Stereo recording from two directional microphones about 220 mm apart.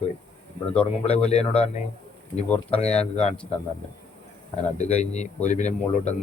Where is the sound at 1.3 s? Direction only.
30° left (ahead or behind).